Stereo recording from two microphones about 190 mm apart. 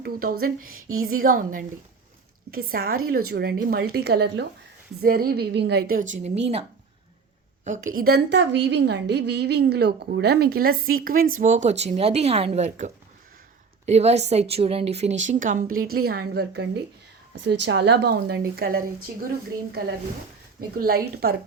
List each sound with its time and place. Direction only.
0.0 s a woman's voice: 50° right (ahead or behind)
0.7 s speech: 90° right
1.1 s a woman's voice: 50° right (ahead or behind)
7.6 s a woman's voice: 40° right (ahead or behind)
20.6 s a woman's voice: 50° right (ahead or behind)